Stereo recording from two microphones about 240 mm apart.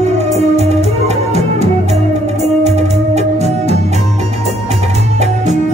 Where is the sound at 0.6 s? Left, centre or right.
Right.